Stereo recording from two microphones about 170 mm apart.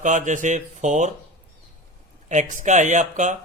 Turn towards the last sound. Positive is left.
turn(degrees=-45)  # may be behind; listen again after turning